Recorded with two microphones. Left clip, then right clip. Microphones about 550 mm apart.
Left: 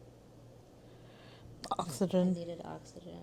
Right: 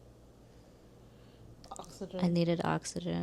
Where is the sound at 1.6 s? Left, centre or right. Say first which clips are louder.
Left 10 dB; left.